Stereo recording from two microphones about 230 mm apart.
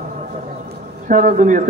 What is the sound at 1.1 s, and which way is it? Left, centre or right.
Speech, right.